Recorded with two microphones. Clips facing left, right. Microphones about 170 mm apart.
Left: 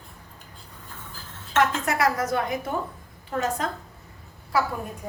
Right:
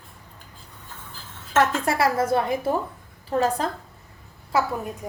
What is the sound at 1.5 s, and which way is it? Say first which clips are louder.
A woman's voice: right 2 dB; 30° right (ahead or behind).